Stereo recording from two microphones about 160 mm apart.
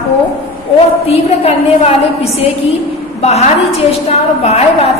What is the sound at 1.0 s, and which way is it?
Speech, 40° left (ahead or behind).